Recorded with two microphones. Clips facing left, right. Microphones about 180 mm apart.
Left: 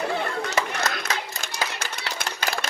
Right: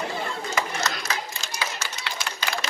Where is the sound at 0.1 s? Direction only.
65° left (ahead or behind).